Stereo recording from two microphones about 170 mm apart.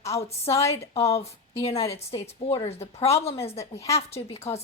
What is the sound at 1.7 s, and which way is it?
Speech, 15° left (ahead or behind).